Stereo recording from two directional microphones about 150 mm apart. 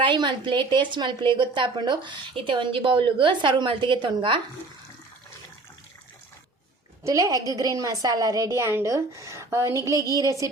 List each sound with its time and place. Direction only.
0.0 s speech: 30° right (ahead or behind)
7.0 s a woman's voice: 20° right (ahead or behind)